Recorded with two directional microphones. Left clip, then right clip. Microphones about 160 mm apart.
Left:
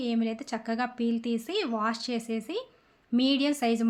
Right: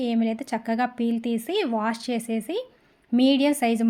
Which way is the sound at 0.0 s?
20° right (ahead or behind).